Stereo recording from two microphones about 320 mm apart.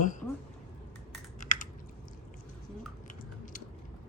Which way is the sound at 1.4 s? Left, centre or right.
Left.